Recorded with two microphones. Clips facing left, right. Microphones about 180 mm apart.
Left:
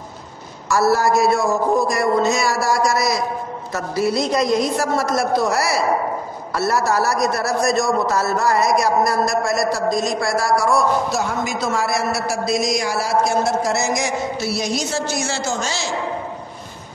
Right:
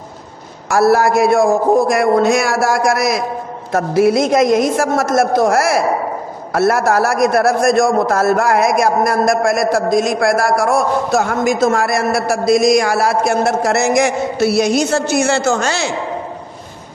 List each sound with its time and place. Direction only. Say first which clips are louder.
0.7 s a man's voice: right 5 dB; 60° right (ahead or behind)